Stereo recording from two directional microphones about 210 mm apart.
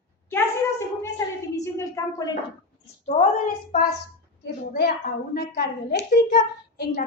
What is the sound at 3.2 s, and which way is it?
Speech, 40° left (ahead or behind).